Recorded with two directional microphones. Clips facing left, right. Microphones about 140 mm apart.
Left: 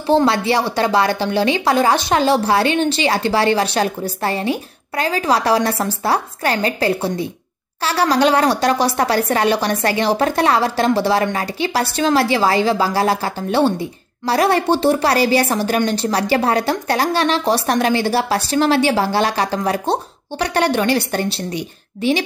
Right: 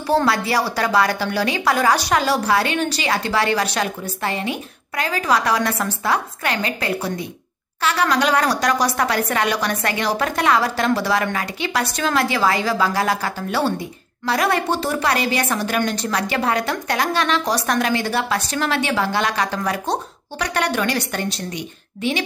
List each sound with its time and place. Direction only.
0.0 s a woman's voice: 25° left (ahead or behind)